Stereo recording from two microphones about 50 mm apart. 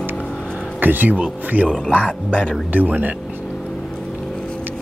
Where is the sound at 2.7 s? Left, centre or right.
Right.